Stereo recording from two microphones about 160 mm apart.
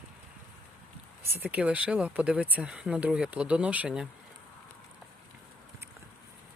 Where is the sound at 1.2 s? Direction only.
15° right (ahead or behind).